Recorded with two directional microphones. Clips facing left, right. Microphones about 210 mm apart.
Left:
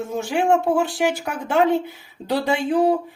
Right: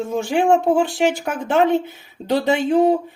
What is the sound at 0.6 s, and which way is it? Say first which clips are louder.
Speech: right 3 dB; 25° right (ahead or behind).